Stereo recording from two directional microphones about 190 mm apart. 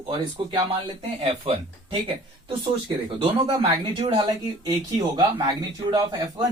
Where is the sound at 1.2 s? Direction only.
25° right (ahead or behind).